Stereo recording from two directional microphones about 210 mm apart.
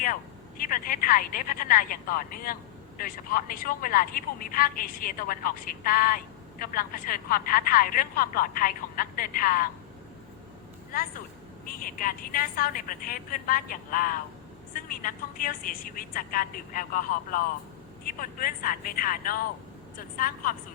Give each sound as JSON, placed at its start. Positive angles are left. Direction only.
{"t": 0.0, "sound": "a woman's voice", "side_deg": 40}
{"t": 11.6, "sound": "a woman's voice", "side_deg": 40}